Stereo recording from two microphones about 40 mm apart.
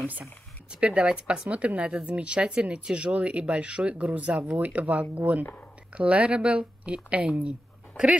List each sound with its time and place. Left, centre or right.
0.7 s speech: right
4.6 s speech: right